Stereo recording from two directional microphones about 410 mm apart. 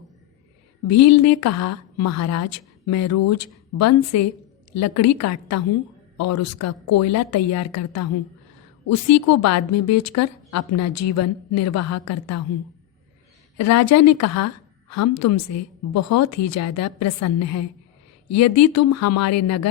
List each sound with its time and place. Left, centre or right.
0.9 s a woman's voice: left
13.6 s a woman's voice: left